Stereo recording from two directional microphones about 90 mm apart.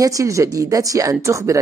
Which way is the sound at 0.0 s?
40° right (ahead or behind).